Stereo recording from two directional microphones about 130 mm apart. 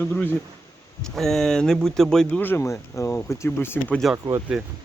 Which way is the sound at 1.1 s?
5° left (ahead or behind).